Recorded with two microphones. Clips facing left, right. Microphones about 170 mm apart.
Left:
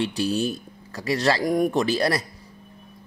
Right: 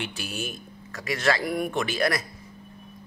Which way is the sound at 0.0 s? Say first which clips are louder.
Left 10 dB; 35° left (ahead or behind).